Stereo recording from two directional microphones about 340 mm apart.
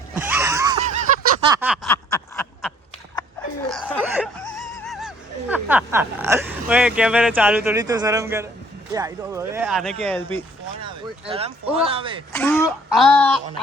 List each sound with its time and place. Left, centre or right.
0.1 s a sound: centre
1.5 s a sound: centre
3.7 s laughter: centre
8.9 s speech: centre
10.8 s speech: centre
12.3 s speech: centre